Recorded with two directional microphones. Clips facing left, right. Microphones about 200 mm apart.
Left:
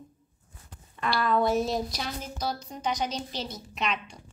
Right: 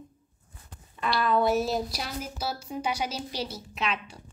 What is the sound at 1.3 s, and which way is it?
A woman's voice, centre (ahead or behind).